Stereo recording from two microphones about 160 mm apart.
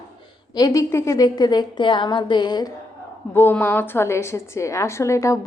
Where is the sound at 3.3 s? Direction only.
10° left (ahead or behind).